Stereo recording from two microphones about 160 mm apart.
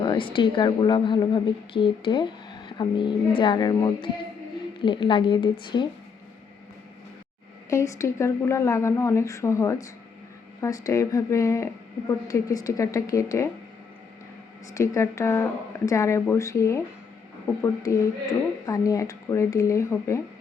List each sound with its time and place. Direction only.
0.0 s a woman's voice: 30° left (ahead or behind)
7.7 s a woman's voice: 20° left (ahead or behind)
14.7 s a woman's voice: 20° left (ahead or behind)